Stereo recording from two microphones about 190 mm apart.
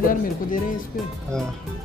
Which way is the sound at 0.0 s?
45° left (ahead or behind).